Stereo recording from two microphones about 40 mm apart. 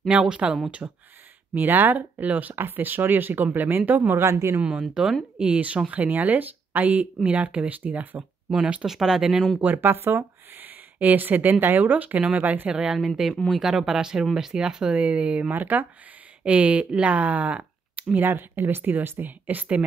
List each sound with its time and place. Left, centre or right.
0.3 s speech: right
1.5 s speech: right
2.5 s speech: right
4.6 s speech: right
8.5 s speech: right
8.8 s speech: centre
9.8 s speech: right
12.6 s speech: centre
12.9 s speech: centre; by 15.5 s right
15.5 s speech: right
16.4 s speech: right
18.2 s speech: right